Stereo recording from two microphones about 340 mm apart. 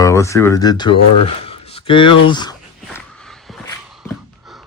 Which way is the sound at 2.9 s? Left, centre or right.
Centre.